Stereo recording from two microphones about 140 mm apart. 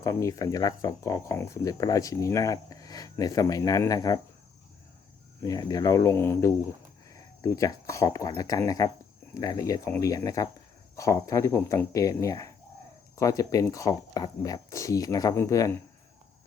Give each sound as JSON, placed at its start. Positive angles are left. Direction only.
{"t": 0.0, "sound": "speech", "side_deg": 20}
{"t": 5.4, "sound": "speech", "side_deg": 25}